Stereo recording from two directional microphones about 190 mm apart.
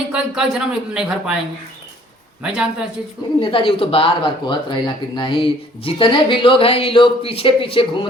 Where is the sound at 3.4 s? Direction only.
25° left (ahead or behind).